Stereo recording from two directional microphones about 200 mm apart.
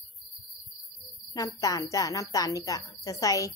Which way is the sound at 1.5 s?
15° left (ahead or behind).